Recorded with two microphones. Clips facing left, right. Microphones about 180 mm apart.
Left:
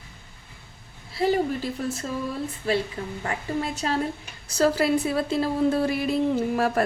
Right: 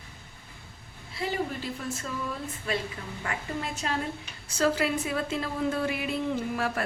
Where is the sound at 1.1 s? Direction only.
40° left (ahead or behind).